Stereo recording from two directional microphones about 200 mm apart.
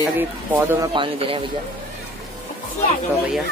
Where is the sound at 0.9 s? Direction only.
25° right (ahead or behind).